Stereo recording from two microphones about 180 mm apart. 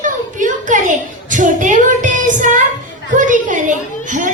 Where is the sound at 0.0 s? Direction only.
45° right (ahead or behind).